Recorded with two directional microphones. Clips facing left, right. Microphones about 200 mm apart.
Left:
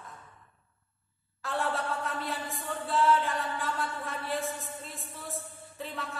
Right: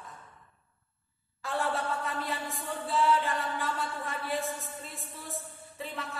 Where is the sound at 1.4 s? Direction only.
Centre (ahead or behind).